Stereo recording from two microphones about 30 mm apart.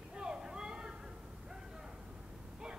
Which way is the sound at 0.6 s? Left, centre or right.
Right.